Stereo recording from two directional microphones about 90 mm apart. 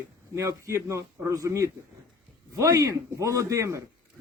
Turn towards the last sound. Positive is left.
turn(degrees=-35)  # may be behind; listen again after turning